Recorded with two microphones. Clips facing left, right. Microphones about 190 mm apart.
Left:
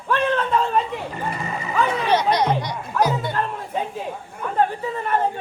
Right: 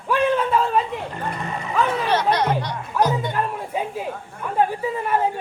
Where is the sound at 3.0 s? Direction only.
10° right (ahead or behind).